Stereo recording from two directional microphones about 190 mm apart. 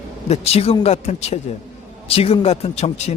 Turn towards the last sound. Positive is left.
turn(degrees=35)  # may be behind; listen again after turning